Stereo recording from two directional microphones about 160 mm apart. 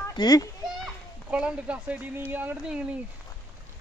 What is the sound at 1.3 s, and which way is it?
Speech, 5° right (ahead or behind).